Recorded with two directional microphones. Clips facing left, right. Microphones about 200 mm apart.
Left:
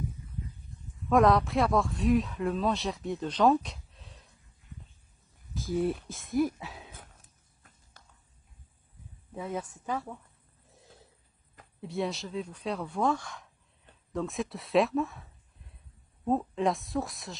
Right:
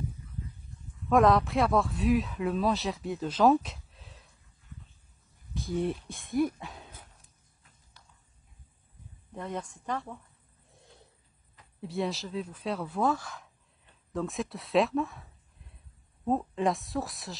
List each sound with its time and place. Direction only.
1.0 s speech: centre (ahead or behind)
5.5 s a sound: centre (ahead or behind)
6.0 s speech: centre (ahead or behind)
8.0 s a sound: 50° left (ahead or behind)
9.3 s speech: 5° left (ahead or behind)
10.7 s snort: centre (ahead or behind)
11.8 s speech: centre (ahead or behind)